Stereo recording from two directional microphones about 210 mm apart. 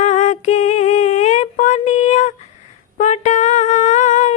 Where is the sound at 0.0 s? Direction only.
35° left (ahead or behind).